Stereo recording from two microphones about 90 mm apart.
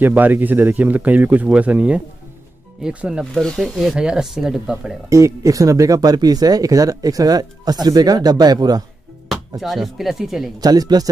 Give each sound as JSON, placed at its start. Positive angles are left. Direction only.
{"t": 0.0, "sound": "speech", "side_deg": -20}
{"t": 3.3, "sound": "speech", "side_deg": 5}
{"t": 5.1, "sound": "speech", "side_deg": -35}
{"t": 9.6, "sound": "speech", "side_deg": 0}
{"t": 10.6, "sound": "speech", "side_deg": -45}